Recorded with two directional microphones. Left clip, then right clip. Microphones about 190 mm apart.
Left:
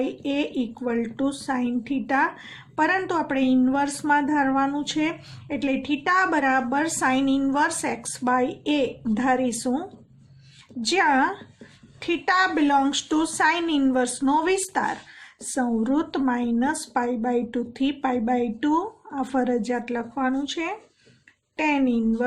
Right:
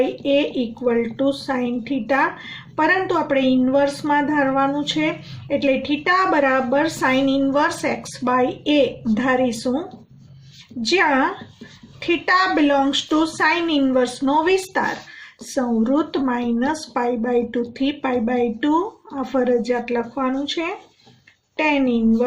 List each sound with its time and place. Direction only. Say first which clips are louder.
0.0 s speech: right 8 dB; 50° left (ahead or behind)
10.8 s speech: right 3 dB; 45° left (ahead or behind)